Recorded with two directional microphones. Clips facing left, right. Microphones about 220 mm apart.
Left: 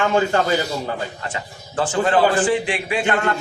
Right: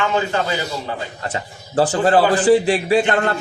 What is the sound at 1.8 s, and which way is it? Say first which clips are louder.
Speech: right 3 dB; 40° right (ahead or behind).